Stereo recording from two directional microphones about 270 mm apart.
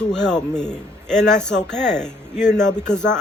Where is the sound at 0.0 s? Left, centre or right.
Centre.